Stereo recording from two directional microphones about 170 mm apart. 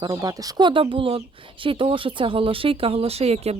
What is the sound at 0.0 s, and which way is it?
Speech, 20° right (ahead or behind).